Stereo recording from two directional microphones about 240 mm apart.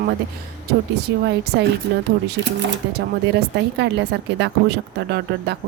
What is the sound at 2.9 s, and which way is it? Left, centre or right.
A woman's voice, right.